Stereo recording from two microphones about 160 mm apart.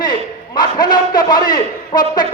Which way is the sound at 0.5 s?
25° left (ahead or behind).